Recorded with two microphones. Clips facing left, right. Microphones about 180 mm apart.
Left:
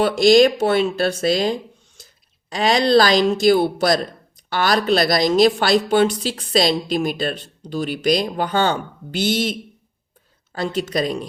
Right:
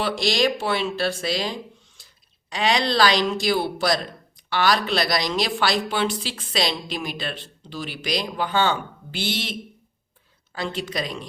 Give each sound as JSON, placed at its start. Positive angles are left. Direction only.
{"t": 0.0, "sound": "speech", "side_deg": 50}